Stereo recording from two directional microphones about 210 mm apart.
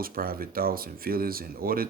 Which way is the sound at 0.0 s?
45° right (ahead or behind).